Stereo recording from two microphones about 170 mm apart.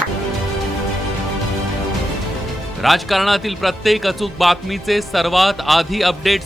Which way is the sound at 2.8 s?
Centre (ahead or behind).